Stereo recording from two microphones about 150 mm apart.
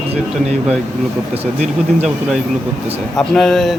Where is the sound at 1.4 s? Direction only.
45° right (ahead or behind).